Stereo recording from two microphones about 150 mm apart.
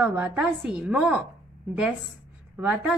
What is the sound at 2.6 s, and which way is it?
Speech, 10° right (ahead or behind).